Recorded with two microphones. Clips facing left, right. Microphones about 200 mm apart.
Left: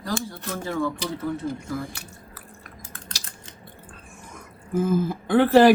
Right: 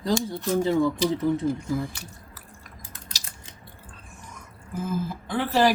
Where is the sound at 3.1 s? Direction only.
55° left (ahead or behind).